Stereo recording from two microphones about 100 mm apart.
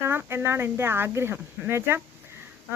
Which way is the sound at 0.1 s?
20° right (ahead or behind).